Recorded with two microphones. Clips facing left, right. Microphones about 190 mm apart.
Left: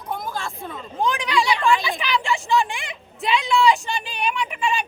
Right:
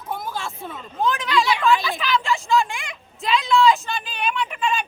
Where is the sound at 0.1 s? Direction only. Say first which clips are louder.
Even; 5° right (ahead or behind).